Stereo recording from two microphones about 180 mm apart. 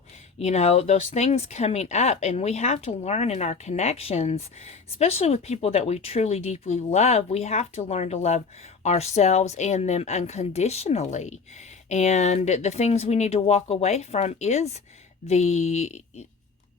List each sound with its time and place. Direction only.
0.3 s speech: 35° left (ahead or behind)